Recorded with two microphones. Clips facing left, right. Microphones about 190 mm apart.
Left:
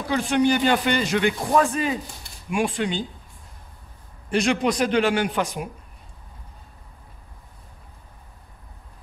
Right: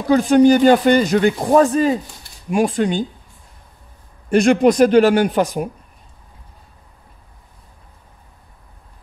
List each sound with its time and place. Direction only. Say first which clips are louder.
0.1 s a man's voice: right 9 dB; 40° right (ahead or behind)
4.3 s a man's voice: right 9 dB; 45° right (ahead or behind)